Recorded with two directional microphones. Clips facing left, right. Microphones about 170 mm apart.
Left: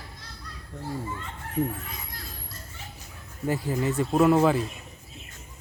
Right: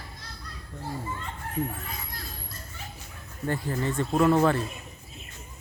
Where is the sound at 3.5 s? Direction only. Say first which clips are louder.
Left 2 dB; 5° left (ahead or behind).